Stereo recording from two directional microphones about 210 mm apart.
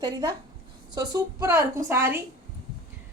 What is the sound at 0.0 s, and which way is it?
Speech, 20° right (ahead or behind).